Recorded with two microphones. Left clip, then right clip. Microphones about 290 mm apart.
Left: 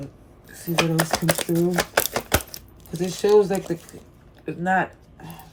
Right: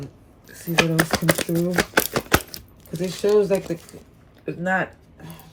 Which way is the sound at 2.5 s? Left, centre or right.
Centre.